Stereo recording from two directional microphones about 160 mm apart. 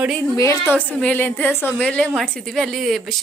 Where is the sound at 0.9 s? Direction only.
10° left (ahead or behind).